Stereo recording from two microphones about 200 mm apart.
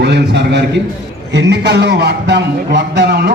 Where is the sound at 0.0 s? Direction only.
60° right (ahead or behind).